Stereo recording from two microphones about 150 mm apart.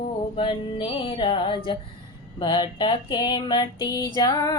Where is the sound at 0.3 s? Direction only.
35° left (ahead or behind).